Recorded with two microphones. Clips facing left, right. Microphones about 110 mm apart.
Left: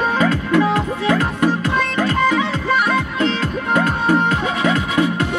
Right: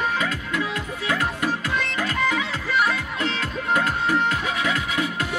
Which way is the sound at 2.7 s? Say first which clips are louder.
Left 2 dB; 50° left (ahead or behind).